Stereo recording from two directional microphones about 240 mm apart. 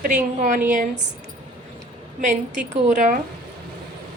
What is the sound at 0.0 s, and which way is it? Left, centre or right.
Speech, right.